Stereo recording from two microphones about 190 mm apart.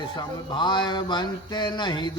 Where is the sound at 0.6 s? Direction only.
25° left (ahead or behind).